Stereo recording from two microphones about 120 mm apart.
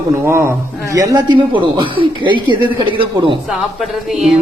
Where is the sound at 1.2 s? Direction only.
45° right (ahead or behind).